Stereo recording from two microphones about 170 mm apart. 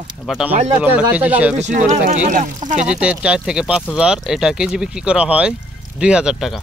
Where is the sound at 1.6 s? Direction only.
45° right (ahead or behind).